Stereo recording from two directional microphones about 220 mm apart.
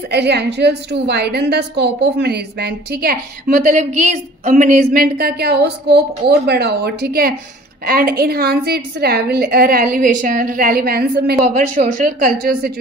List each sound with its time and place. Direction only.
0.1 s a woman's voice: 50° right (ahead or behind)